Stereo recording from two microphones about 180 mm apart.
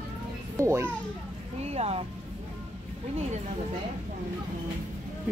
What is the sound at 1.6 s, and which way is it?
Speech, 35° right (ahead or behind).